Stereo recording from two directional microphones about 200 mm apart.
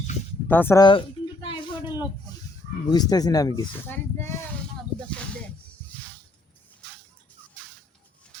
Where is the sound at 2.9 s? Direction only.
20° left (ahead or behind).